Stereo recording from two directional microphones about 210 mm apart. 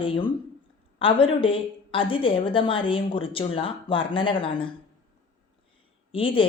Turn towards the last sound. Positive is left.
turn(degrees=25)  # may be behind; listen again after turning